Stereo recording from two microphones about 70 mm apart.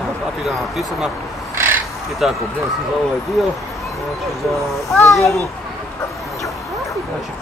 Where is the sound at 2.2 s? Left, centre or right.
Centre.